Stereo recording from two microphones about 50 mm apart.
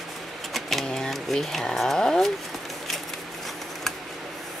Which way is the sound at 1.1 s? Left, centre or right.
Centre.